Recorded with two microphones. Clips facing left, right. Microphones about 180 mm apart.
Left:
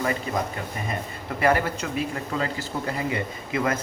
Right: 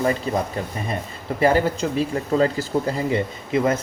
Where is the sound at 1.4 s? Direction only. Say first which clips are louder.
Right 4 dB; 30° right (ahead or behind).